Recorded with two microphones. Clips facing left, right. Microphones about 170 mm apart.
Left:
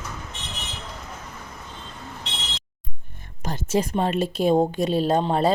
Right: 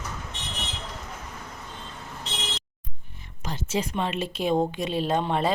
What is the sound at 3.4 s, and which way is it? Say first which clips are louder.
Speech: left 5 dB; 45° left (ahead or behind).